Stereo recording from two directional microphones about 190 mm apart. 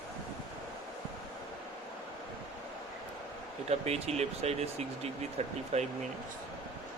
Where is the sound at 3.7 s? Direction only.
35° right (ahead or behind).